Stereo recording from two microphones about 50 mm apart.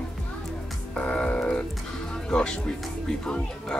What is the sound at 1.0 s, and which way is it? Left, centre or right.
Music, left.